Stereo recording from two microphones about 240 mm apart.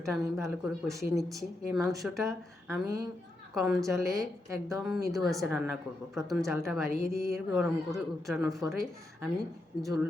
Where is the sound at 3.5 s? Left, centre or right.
Centre.